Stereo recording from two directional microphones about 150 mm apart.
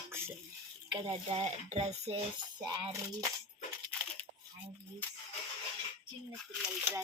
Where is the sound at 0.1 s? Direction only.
15° right (ahead or behind).